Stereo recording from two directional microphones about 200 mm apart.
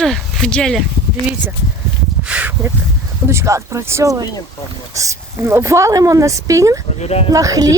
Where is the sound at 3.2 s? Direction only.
15° right (ahead or behind).